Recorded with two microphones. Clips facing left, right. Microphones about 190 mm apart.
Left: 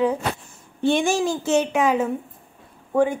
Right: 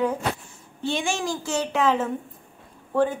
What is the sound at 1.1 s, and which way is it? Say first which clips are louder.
A child's voice: left 7 dB; 25° left (ahead or behind).